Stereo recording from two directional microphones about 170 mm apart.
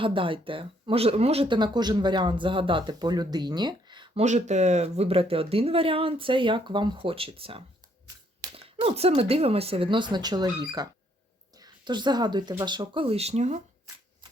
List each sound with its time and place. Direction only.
0.0 s speech: 30° right (ahead or behind)
4.2 s speech: 45° right (ahead or behind)